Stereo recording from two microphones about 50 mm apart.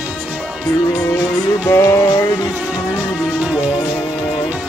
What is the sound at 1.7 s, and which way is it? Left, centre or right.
Music, left.